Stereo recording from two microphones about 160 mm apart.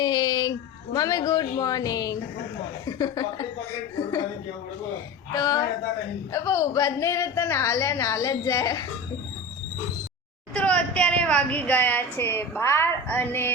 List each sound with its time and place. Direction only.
0.0 s a sound: 25° left (ahead or behind)
0.9 s a woman's voice: 25° left (ahead or behind)
5.3 s a woman's voice: 20° left (ahead or behind)
10.5 s a woman's voice: 5° left (ahead or behind)